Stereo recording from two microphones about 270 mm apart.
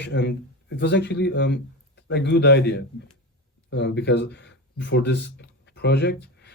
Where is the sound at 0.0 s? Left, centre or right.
Left.